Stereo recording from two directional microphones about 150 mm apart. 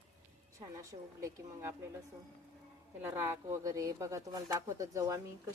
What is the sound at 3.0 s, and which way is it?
Speech, 15° right (ahead or behind).